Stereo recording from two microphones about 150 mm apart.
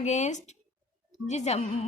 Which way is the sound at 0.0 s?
50° left (ahead or behind).